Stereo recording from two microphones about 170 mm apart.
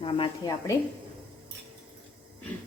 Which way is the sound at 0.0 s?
30° left (ahead or behind).